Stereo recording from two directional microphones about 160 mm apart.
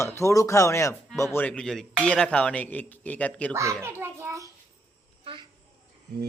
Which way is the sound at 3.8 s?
15° right (ahead or behind).